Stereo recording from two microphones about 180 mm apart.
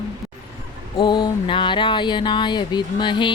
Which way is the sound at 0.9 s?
25° left (ahead or behind).